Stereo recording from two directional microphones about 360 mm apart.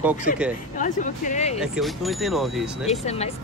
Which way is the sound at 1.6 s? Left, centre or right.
Centre.